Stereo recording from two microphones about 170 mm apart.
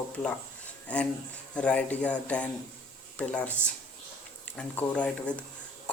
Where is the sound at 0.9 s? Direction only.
5° left (ahead or behind).